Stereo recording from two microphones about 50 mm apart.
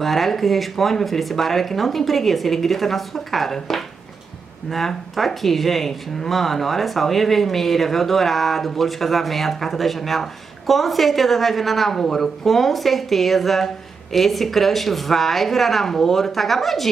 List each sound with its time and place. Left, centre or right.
0.0 s speech: centre